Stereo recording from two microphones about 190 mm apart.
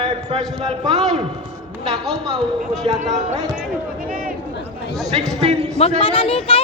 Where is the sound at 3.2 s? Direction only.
35° right (ahead or behind).